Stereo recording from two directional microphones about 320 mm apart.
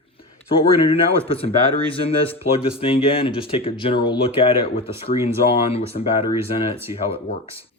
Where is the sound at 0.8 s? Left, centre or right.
Centre.